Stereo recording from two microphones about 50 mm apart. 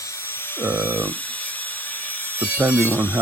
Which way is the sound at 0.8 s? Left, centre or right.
Right.